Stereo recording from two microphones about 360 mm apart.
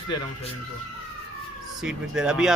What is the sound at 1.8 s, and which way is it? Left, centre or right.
Speech, centre.